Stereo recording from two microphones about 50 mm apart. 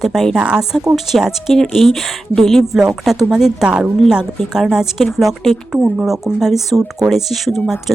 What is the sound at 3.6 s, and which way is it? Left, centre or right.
Speech, centre.